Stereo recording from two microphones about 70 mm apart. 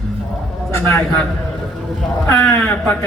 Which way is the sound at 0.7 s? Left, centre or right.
Left.